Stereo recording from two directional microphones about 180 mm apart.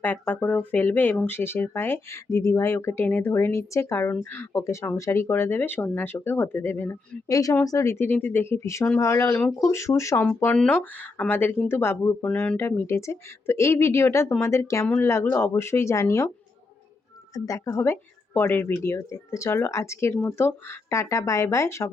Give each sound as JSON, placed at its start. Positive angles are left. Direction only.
{"t": 0.0, "sound": "speech", "side_deg": 10}
{"t": 17.3, "sound": "speech", "side_deg": 20}